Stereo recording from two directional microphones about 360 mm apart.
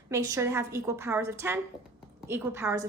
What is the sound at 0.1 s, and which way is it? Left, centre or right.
A woman's voice, centre.